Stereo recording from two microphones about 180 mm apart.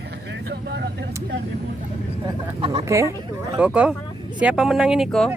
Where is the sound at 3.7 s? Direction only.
5° right (ahead or behind).